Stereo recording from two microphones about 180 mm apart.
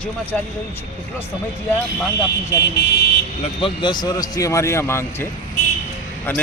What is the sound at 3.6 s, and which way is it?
Speech, 25° left (ahead or behind).